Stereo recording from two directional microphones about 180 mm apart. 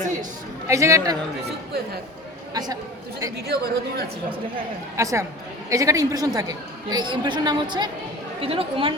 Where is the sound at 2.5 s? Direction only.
20° right (ahead or behind).